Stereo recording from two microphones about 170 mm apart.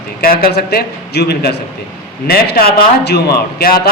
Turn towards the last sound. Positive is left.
turn(degrees=70)  # may be behind; listen again after turning